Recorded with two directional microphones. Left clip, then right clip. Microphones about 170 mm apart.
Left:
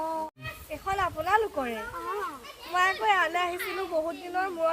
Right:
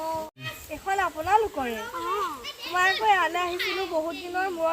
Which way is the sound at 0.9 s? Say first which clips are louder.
Right 2 dB; 10° left (ahead or behind).